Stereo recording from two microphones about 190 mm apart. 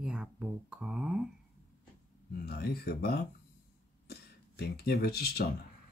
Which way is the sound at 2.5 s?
55° left (ahead or behind).